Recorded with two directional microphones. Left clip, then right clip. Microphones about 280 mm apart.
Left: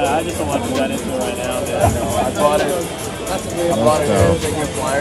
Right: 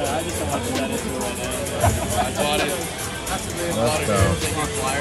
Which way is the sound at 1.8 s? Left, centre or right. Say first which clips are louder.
Left 5 dB; right.